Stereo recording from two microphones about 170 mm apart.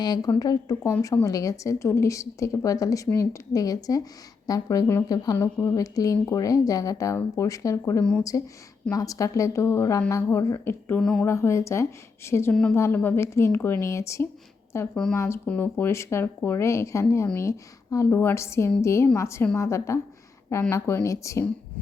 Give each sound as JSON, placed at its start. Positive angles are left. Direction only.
{"t": 0.0, "sound": "a woman's voice", "side_deg": 25}
{"t": 11.3, "sound": "speech", "side_deg": 15}